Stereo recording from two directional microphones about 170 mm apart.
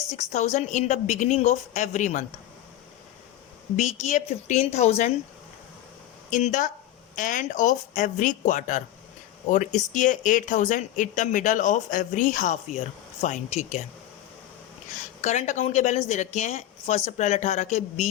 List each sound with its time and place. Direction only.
0.1 s speech: 40° left (ahead or behind)
3.8 s speech: 45° left (ahead or behind)
6.3 s speech: 45° left (ahead or behind)
15.2 s speech: 45° left (ahead or behind)